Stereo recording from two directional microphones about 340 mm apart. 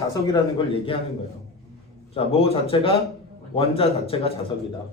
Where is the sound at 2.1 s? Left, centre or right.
Centre.